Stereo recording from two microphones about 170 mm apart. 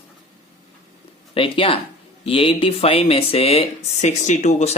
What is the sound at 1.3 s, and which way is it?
Speech, 30° left (ahead or behind).